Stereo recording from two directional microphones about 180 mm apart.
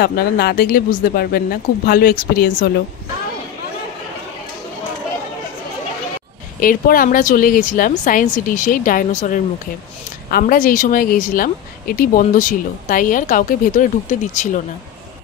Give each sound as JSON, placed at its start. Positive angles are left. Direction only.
{"t": 0.0, "sound": "speech", "side_deg": 55}
{"t": 6.6, "sound": "speech", "side_deg": 50}